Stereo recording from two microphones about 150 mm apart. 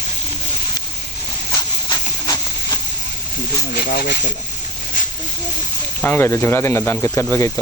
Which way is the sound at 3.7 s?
90° left.